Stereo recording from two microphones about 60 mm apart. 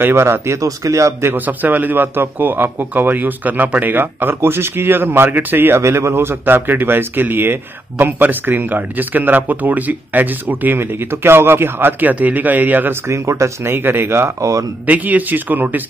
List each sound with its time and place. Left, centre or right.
0.0 s speech: right
1.3 s speech: right
5.8 s speech: right
13.0 s speech: right
13.7 s speech: right
14.9 s speech: right